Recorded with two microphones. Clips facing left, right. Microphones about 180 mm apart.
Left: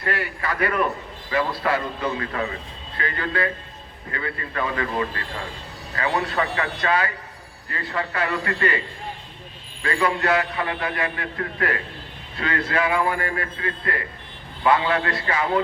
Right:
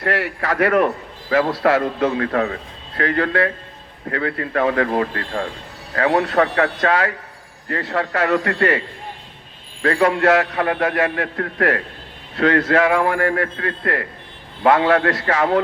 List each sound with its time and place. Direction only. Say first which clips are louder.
0.0 s a man's voice: right 5 dB; 70° right (ahead or behind)
3.0 s a man's voice: right 7 dB; 70° right (ahead or behind)
9.8 s a man's voice: right 7 dB; 65° right (ahead or behind)
12.4 s a man's voice: right 8 dB; 75° right (ahead or behind)